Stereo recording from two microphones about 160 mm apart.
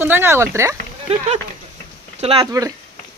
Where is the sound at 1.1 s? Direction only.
45° right (ahead or behind).